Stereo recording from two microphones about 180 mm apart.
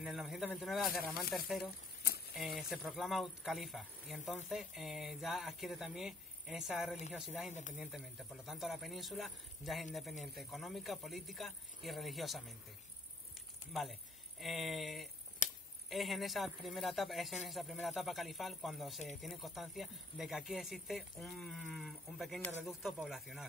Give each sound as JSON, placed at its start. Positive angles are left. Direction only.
{"t": 0.0, "sound": "a man's voice", "side_deg": 0}
{"t": 2.0, "sound": "a sound", "side_deg": 60}
{"t": 2.3, "sound": "speech", "side_deg": 0}
{"t": 14.4, "sound": "speech", "side_deg": 0}
{"t": 15.4, "sound": "a sound", "side_deg": 45}
{"t": 15.9, "sound": "speech", "side_deg": 0}